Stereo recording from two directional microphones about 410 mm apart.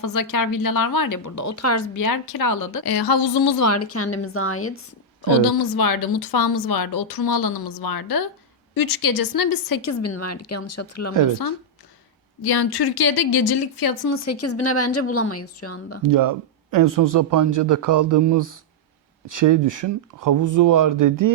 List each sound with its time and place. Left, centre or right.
0.0 s speech: left
3.6 s speech: left
5.7 s speech: left
6.2 s a woman's voice: left
12.4 s speech: left
16.0 s speech: right